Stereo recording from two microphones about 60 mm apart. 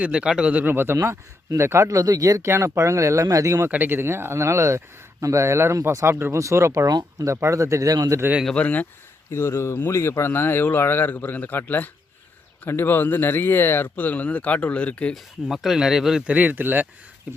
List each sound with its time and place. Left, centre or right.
0.0 s speech: centre
0.7 s speech: right
1.5 s speech: right
2.4 s speech: right
3.7 s speech: right
6.4 s speech: right
6.8 s speech: right
8.5 s speech: left
9.3 s speech: left
15.1 s speech: centre
16.2 s speech: right